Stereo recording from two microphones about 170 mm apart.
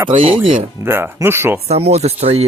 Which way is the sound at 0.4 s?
30° right (ahead or behind).